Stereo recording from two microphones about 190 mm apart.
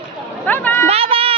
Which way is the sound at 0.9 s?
30° right (ahead or behind).